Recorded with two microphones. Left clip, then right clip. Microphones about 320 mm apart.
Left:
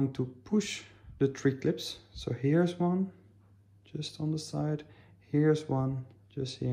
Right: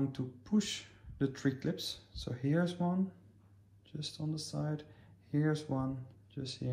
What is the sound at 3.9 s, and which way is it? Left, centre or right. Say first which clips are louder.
Speech: left 3 dB; left.